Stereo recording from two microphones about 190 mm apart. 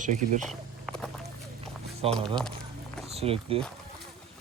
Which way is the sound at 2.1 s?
5° left (ahead or behind).